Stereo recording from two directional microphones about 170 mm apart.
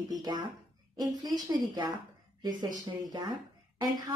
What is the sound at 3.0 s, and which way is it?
A woman's voice, 25° right (ahead or behind).